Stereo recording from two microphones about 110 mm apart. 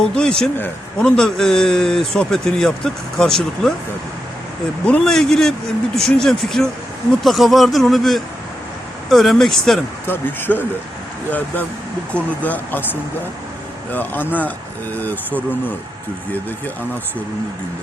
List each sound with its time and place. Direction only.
0.0 s a man's voice: 10° left (ahead or behind)
4.9 s a man's voice: 5° left (ahead or behind)
10.1 s speech: 20° left (ahead or behind)